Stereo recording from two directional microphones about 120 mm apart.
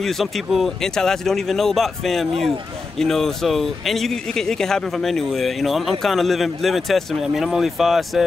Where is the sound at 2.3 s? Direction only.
55° right (ahead or behind).